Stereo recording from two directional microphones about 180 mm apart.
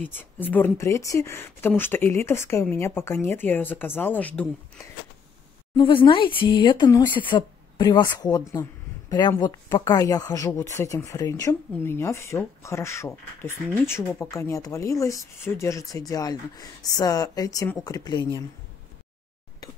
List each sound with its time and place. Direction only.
0.0 s speech: 10° left (ahead or behind)
5.8 s speech: 30° left (ahead or behind)